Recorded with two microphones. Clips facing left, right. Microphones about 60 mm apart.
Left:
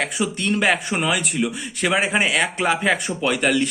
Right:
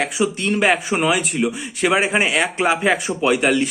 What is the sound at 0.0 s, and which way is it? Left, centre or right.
Speech, centre.